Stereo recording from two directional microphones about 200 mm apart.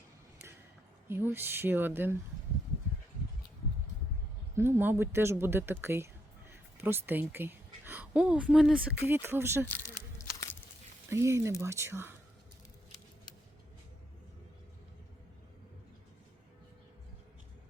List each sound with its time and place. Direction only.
1.0 s speech: 10° right (ahead or behind)
4.5 s a woman's voice: 10° right (ahead or behind)
9.6 s speech: 10° left (ahead or behind)
10.2 s biting: 15° left (ahead or behind)
11.1 s speech: 15° right (ahead or behind)